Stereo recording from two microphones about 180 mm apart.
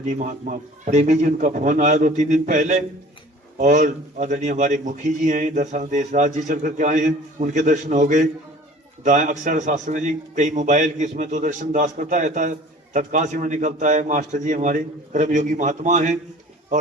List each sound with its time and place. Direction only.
0.0 s a man's voice: 45° right (ahead or behind)